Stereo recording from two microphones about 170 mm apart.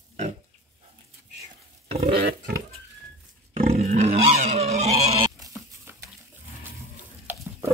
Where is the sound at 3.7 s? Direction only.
40° right (ahead or behind).